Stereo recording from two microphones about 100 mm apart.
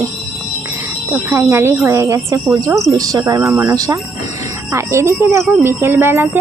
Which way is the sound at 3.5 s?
35° right (ahead or behind).